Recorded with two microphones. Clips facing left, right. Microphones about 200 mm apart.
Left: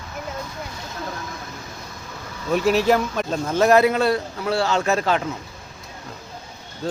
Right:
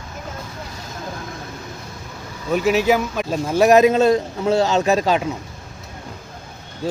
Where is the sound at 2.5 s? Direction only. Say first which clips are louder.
Right 1 dB; 5° right (ahead or behind).